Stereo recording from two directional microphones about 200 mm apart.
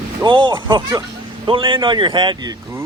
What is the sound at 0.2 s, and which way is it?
Speech, 25° right (ahead or behind).